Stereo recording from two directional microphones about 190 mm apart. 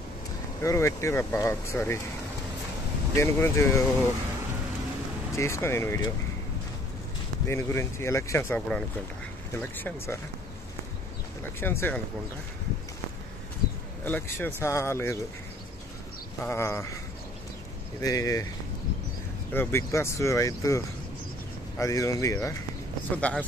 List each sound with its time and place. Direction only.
0.6 s speech: 15° left (ahead or behind)
3.2 s speech: 15° left (ahead or behind)
5.3 s speech: 15° left (ahead or behind)
7.4 s speech: 15° left (ahead or behind)
11.6 s speech: 10° left (ahead or behind)
13.6 s bird: 55° left (ahead or behind)
14.0 s speech: 10° left (ahead or behind)
16.3 s speech: 15° left (ahead or behind)
18.0 s speech: 20° left (ahead or behind)
19.5 s speech: 10° left (ahead or behind)